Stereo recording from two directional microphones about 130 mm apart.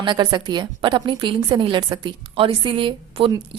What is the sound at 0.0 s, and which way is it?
A woman's voice, 35° right (ahead or behind).